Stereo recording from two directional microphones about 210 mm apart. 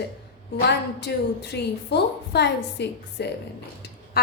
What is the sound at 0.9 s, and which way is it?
A woman's voice, 55° left (ahead or behind).